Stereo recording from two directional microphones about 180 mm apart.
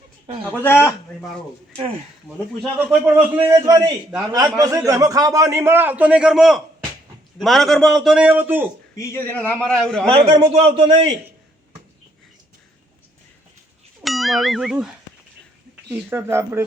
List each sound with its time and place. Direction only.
0.6 s a man's voice: 15° left (ahead or behind)
2.2 s a man's voice: centre (ahead or behind)
3.7 s a man's voice: 20° right (ahead or behind)
9.0 s a man's voice: 15° left (ahead or behind)
10.1 s a man's voice: 30° right (ahead or behind)
14.0 s speech: centre (ahead or behind)